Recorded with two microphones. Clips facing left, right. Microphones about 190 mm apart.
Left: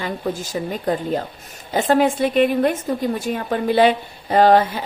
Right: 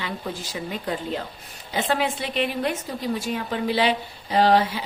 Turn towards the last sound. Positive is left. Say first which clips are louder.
# left 5 dB
turn(degrees=50)  # may be behind; listen again after turning